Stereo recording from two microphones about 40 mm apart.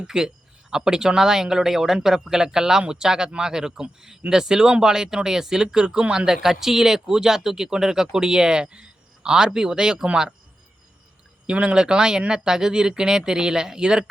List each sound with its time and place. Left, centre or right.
0.0 s speech: centre
11.4 s speech: right